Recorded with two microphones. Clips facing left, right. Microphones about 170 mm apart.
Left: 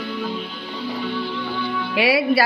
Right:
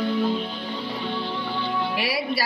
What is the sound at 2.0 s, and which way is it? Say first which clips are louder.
Music: left 8 dB; 70° left (ahead or behind).